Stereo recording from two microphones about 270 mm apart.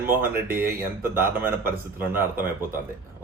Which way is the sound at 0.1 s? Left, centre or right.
Right.